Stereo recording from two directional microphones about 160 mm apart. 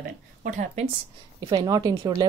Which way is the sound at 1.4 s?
25° right (ahead or behind).